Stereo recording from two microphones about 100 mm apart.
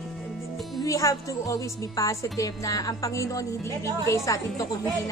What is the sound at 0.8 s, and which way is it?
A woman's voice, 35° left (ahead or behind).